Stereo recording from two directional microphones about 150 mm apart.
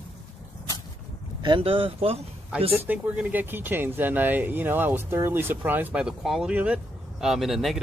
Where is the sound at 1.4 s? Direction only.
35° right (ahead or behind).